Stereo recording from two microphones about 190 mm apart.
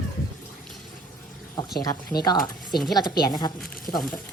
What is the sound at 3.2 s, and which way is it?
Speech, 20° left (ahead or behind).